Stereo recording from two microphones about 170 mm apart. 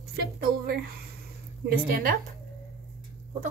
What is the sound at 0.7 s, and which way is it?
A woman's voice, 65° right (ahead or behind).